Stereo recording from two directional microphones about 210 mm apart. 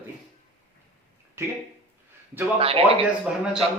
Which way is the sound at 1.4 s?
15° right (ahead or behind).